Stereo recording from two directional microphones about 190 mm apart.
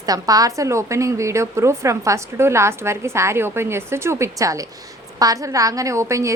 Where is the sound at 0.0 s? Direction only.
20° right (ahead or behind).